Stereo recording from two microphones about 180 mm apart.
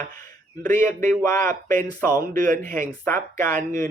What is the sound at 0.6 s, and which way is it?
Speech, 15° left (ahead or behind).